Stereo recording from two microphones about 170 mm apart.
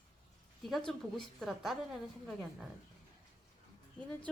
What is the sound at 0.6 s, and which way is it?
Speech, centre (ahead or behind).